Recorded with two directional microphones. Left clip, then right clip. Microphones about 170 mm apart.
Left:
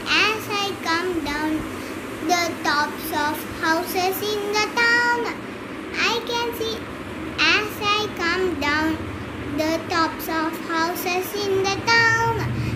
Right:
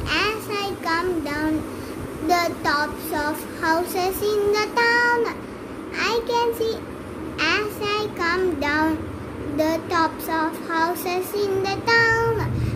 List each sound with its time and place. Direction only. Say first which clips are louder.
0.1 s child singing: left 3 dB; 45° right (ahead or behind)